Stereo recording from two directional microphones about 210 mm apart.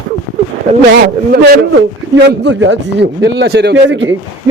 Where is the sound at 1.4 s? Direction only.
45° right (ahead or behind).